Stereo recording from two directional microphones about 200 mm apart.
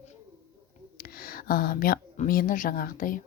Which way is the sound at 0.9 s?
45° left (ahead or behind).